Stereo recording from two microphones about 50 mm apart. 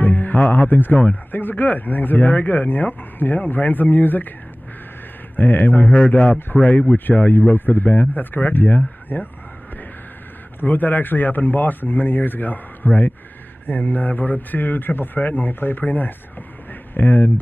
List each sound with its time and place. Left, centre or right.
0.0 s speech: left
5.3 s speech: left
5.9 s speech: left
10.6 s speech: left
16.9 s speech: left